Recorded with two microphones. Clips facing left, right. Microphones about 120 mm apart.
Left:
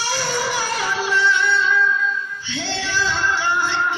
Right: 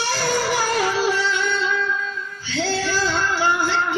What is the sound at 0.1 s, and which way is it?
Music, 50° right (ahead or behind).